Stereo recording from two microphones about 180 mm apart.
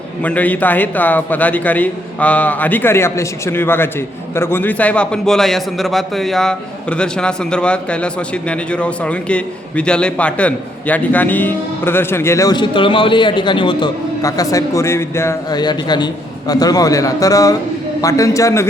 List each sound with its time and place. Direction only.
0.2 s a man's voice: 10° left (ahead or behind)